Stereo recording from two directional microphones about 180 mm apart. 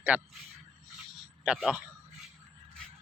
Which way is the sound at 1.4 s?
Centre (ahead or behind).